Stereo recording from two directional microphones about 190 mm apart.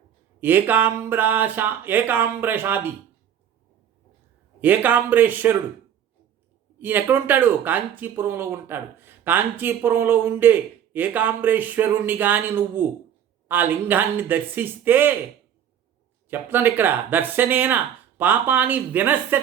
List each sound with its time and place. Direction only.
0.3 s speech: 10° right (ahead or behind)
4.6 s speech: 10° right (ahead or behind)
6.7 s speech: 10° right (ahead or behind)
16.3 s speech: 10° right (ahead or behind)